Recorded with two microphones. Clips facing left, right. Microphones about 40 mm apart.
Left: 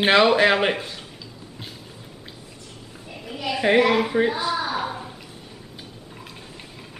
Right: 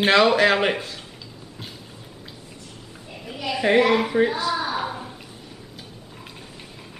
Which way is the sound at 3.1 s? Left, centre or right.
Centre.